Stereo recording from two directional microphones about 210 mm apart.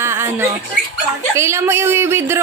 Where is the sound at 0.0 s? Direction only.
10° right (ahead or behind).